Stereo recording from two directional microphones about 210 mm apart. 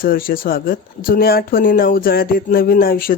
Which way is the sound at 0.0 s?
45° left (ahead or behind).